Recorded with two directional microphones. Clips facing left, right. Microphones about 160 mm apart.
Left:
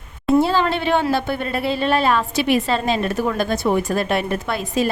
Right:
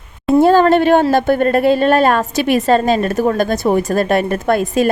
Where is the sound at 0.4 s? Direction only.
50° right (ahead or behind).